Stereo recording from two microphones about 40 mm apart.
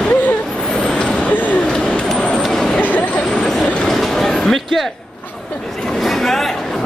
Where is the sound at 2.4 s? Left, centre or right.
Centre.